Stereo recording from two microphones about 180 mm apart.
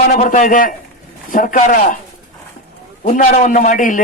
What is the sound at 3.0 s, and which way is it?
Speech, 45° left (ahead or behind).